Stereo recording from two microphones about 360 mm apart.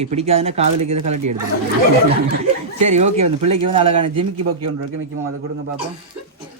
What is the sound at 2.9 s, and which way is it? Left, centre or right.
A man's voice, centre.